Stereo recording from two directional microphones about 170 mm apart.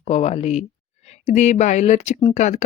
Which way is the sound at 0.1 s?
35° left (ahead or behind).